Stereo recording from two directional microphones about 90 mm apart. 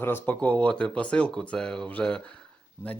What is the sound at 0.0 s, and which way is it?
Speech, 25° left (ahead or behind).